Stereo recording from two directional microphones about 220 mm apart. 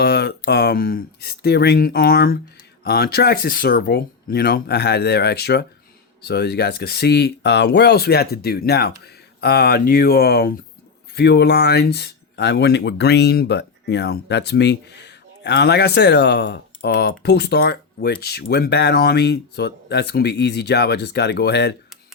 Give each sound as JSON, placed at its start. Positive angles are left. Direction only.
{"t": 0.0, "sound": "speech", "side_deg": 45}